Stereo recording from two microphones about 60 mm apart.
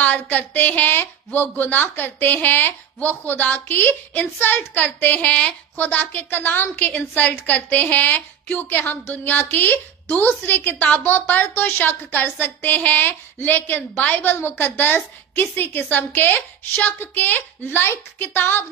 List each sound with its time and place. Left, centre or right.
0.0 s a woman's voice: left